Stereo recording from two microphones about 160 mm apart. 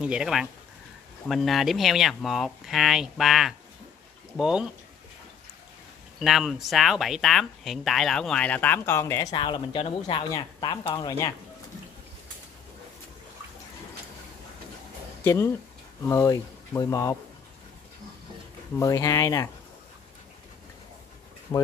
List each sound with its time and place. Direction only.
0.0 s speech: 5° right (ahead or behind)
6.1 s speech: centre (ahead or behind); by 11.3 s 25° left (ahead or behind)
15.2 s speech: 15° left (ahead or behind)
18.8 s speech: 20° left (ahead or behind)
21.5 s speech: 20° left (ahead or behind)